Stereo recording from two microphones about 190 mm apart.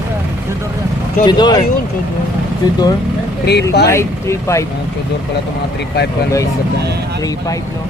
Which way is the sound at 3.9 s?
15° left (ahead or behind).